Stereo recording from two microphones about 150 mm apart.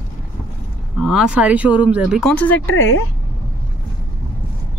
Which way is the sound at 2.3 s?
10° left (ahead or behind).